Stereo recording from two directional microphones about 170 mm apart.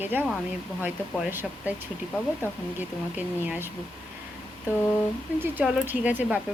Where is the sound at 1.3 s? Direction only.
10° right (ahead or behind).